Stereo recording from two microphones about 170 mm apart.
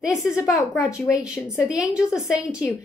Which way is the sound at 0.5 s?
15° left (ahead or behind).